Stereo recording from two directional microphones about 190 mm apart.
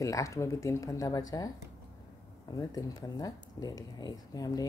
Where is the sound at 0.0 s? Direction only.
15° left (ahead or behind).